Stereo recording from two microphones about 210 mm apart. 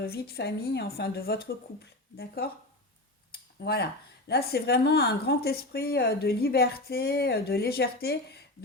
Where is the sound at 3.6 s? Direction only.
50° left (ahead or behind).